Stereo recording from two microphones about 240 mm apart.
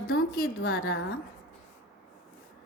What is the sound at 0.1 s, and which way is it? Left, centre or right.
Speech, left.